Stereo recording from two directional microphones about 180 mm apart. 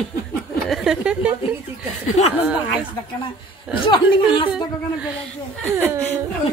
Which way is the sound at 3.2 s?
25° left (ahead or behind).